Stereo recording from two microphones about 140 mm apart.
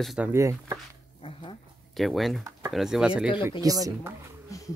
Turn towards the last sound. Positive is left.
turn(degrees=25)  # may be behind; listen again after turning